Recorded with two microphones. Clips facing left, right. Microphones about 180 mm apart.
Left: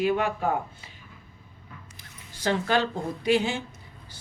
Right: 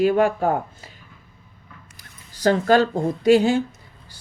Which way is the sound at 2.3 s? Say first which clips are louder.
Right 8 dB; 40° right (ahead or behind).